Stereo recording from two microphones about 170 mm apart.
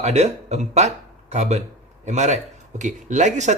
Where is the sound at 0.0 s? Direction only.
40° right (ahead or behind).